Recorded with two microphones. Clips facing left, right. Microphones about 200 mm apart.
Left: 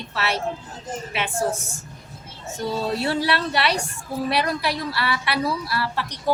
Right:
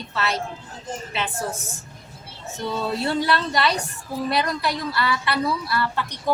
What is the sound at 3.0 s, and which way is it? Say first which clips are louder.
A woman's voice: even; 5° left (ahead or behind).